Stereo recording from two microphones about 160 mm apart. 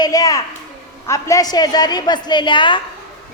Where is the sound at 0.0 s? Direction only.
20° left (ahead or behind).